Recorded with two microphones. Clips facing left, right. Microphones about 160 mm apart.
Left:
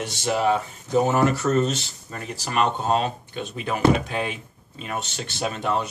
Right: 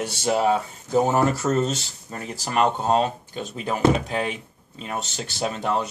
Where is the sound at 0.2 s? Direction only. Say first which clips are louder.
Right 1 dB; 35° right (ahead or behind).